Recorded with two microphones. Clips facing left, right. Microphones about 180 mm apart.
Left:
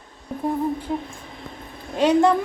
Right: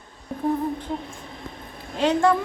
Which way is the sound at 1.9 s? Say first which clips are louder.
Left 3 dB; 15° left (ahead or behind).